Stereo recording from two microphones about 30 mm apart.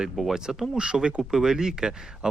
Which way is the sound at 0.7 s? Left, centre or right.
Right.